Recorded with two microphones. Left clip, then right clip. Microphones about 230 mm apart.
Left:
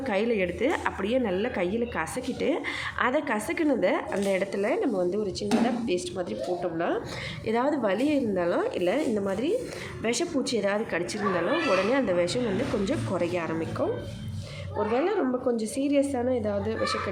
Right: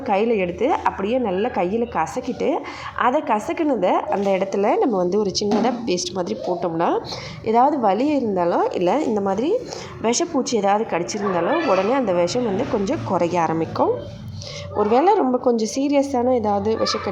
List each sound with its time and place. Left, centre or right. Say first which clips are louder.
0.1 s a woman's voice: right 8 dB; centre; by 7.0 s right
7.4 s a woman's voice: right 10 dB; centre
9.1 s a woman's voice: right 7 dB; centre
14.9 s a woman's voice: right 11 dB; right